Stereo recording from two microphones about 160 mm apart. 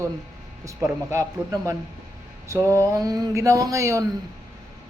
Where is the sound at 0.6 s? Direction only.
20° right (ahead or behind).